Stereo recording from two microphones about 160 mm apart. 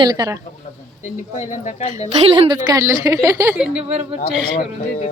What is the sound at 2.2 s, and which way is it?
Speech, 30° right (ahead or behind).